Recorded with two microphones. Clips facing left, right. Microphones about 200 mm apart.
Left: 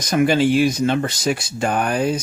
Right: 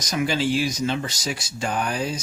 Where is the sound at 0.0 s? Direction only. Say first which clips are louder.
Left 7 dB; 55° left (ahead or behind).